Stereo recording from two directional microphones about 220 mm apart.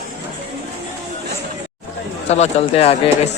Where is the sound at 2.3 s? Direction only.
30° left (ahead or behind).